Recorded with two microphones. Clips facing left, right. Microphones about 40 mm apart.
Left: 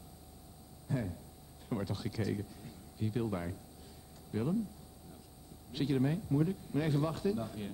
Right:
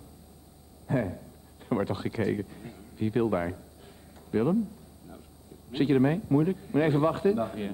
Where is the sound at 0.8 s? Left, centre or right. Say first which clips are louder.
Right 9 dB; right.